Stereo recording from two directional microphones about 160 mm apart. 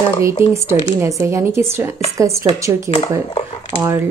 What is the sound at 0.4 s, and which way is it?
A woman's voice, 15° right (ahead or behind).